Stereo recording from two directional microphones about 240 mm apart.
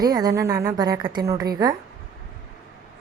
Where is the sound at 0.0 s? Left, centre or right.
Centre.